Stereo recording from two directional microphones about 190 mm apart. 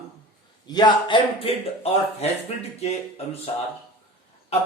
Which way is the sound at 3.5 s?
30° left (ahead or behind).